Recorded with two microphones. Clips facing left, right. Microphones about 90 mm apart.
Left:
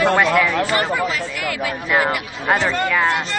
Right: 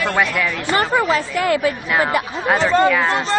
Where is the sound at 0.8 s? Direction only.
35° right (ahead or behind).